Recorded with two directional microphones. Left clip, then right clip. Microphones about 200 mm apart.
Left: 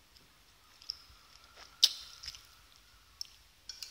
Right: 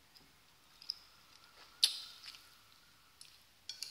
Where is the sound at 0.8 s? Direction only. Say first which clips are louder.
Left 1 dB; 10° left (ahead or behind).